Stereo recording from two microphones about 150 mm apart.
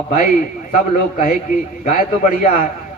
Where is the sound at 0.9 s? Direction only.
65° left (ahead or behind).